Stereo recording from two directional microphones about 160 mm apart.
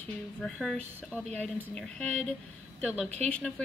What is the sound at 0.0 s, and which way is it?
Speech, 5° left (ahead or behind).